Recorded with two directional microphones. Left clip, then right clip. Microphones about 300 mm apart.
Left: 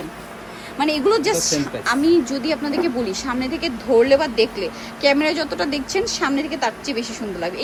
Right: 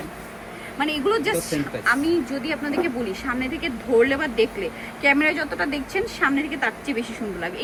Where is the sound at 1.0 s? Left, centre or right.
Centre.